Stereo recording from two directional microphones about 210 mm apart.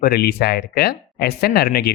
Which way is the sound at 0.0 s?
50° left (ahead or behind).